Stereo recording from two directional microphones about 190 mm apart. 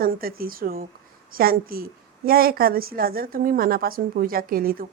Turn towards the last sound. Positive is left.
turn(degrees=-50)  # may be behind; listen again after turning